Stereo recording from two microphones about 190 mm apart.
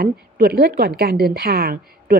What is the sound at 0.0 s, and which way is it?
A woman's voice, 55° right (ahead or behind).